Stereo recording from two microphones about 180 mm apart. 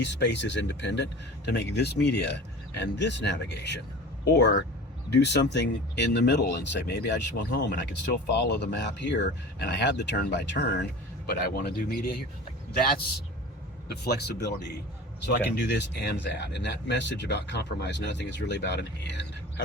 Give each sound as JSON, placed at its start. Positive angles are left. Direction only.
{"t": 0.0, "sound": "speech", "side_deg": 75}
{"t": 11.3, "sound": "speech", "side_deg": 55}
{"t": 13.9, "sound": "speech", "side_deg": 65}
{"t": 15.6, "sound": "speech", "side_deg": 75}